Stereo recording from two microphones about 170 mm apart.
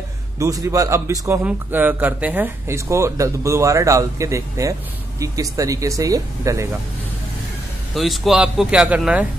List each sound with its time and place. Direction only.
0.4 s a man's voice: 20° right (ahead or behind)
7.9 s a man's voice: centre (ahead or behind)